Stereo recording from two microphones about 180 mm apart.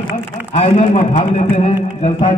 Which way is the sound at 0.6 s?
35° left (ahead or behind).